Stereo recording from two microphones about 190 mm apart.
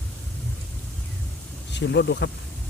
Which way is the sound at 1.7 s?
65° left (ahead or behind).